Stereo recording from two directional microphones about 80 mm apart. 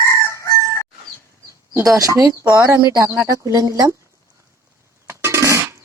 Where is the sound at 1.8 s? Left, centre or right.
Right.